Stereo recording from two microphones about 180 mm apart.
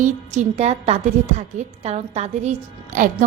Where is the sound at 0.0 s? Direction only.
40° right (ahead or behind).